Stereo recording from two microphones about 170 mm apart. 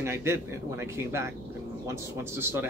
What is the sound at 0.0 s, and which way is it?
Speech, 15° right (ahead or behind).